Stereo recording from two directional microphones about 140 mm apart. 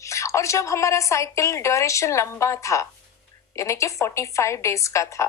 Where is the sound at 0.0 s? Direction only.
20° left (ahead or behind).